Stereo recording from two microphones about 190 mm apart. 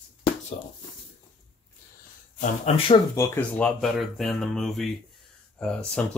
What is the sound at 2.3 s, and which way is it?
Speech, 45° left (ahead or behind).